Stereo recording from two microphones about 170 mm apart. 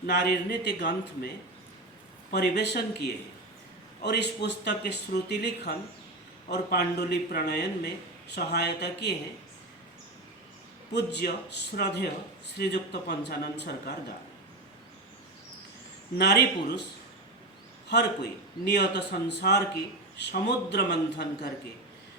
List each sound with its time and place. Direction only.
0.0 s speech: 75° left (ahead or behind)
2.3 s a man's voice: 75° left (ahead or behind)
10.9 s a man's voice: 85° left
16.1 s a man's voice: 75° left (ahead or behind)
17.8 s a man's voice: 80° left